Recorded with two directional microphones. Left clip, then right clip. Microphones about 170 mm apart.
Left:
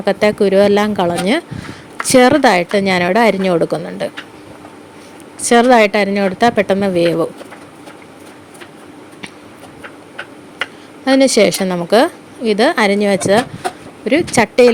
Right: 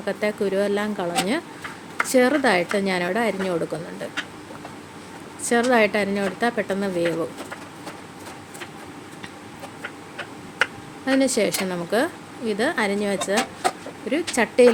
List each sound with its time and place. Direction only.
0.0 s a woman's voice: 45° left (ahead or behind)
5.4 s a woman's voice: 45° left (ahead or behind)
11.0 s a woman's voice: 45° left (ahead or behind)